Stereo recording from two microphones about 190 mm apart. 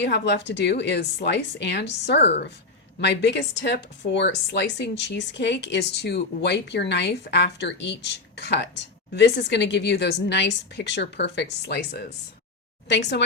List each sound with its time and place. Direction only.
0.0 s speech: 65° left (ahead or behind)